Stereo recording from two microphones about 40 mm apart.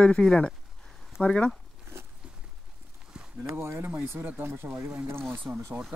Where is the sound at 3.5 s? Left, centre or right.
Right.